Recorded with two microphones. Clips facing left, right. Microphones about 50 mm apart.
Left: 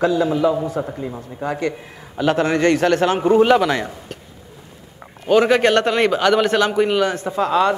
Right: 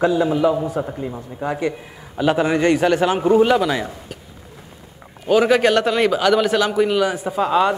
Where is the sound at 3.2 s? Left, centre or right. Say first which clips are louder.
Left 2 dB; centre.